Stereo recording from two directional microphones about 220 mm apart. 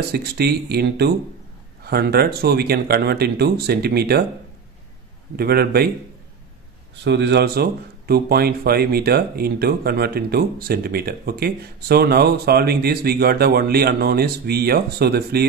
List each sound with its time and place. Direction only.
0.1 s speech: 45° right (ahead or behind)
5.3 s speech: 45° right (ahead or behind)
7.1 s speech: 50° right (ahead or behind)